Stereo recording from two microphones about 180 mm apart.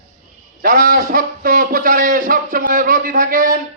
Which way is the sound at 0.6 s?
50° right (ahead or behind).